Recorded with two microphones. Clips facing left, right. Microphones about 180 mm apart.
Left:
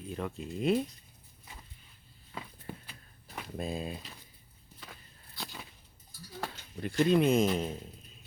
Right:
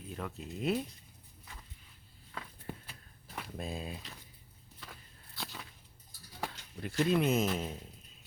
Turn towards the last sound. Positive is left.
turn(degrees=-5)  # may be behind; listen again after turning